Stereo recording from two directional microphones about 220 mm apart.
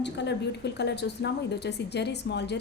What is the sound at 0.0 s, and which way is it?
A woman's voice, 50° left (ahead or behind).